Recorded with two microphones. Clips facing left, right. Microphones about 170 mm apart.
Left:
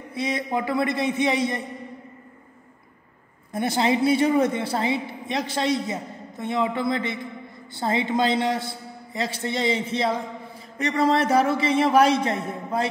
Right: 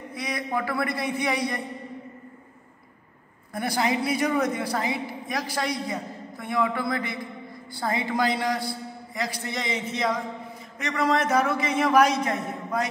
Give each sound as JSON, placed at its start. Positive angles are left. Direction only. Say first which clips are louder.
{"t": 0.1, "sound": "a man's voice", "louder": "left 4 dB", "side_deg": 25}
{"t": 3.5, "sound": "a man's voice", "louder": "left 3 dB", "side_deg": 25}